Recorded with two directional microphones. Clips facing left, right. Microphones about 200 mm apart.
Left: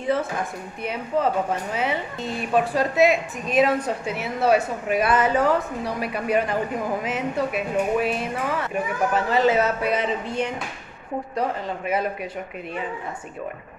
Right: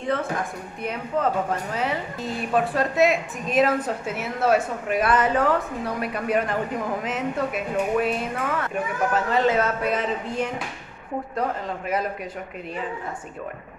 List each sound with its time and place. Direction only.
0.0 s a woman's voice: 5° left (ahead or behind)